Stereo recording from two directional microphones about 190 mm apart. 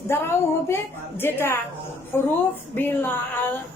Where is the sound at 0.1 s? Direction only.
15° left (ahead or behind).